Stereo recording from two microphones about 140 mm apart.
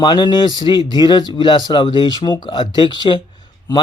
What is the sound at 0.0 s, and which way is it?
Speech, 35° left (ahead or behind).